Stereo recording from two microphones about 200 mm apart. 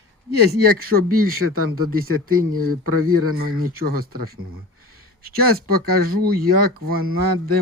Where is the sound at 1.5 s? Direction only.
90° right.